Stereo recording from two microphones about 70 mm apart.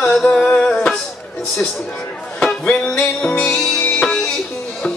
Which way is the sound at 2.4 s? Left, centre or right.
Centre.